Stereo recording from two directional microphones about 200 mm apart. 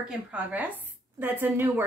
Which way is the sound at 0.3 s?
10° right (ahead or behind).